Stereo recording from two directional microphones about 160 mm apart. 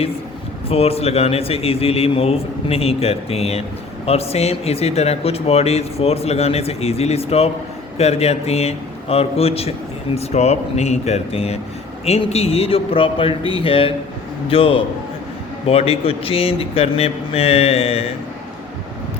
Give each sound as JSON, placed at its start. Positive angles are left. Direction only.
{"t": 0.7, "sound": "speech", "side_deg": 40}